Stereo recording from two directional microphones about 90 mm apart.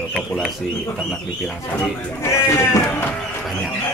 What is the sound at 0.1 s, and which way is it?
Bird, centre (ahead or behind).